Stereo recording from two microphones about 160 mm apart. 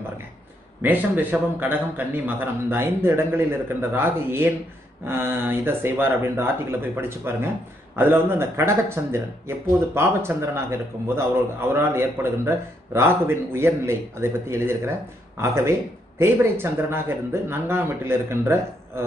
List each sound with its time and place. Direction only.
0.8 s a man's voice: 10° right (ahead or behind)